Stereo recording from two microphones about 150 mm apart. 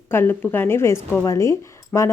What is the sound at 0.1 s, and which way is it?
A woman's voice, 15° left (ahead or behind).